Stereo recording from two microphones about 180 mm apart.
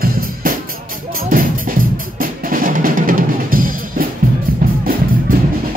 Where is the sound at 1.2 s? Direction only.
50° right (ahead or behind).